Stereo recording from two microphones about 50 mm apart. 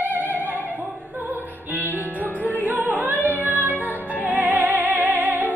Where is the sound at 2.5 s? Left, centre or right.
Right.